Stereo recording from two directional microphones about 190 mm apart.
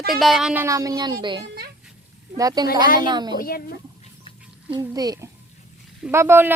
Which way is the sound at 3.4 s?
50° left (ahead or behind).